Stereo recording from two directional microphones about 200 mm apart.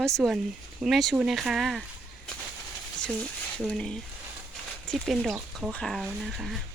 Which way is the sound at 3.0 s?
5° left (ahead or behind).